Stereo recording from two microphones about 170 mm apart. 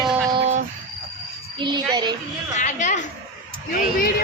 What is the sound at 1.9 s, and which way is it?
Speech, 25° right (ahead or behind).